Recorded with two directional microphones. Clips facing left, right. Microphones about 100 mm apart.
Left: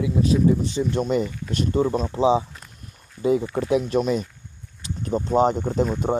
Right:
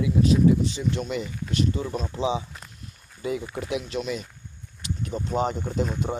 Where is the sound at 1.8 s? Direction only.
35° left (ahead or behind).